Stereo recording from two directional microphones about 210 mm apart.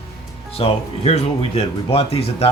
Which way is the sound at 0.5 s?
30° left (ahead or behind).